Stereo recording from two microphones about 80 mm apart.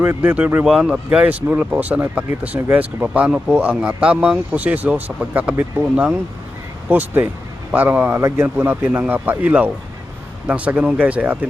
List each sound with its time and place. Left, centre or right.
0.0 s speech: centre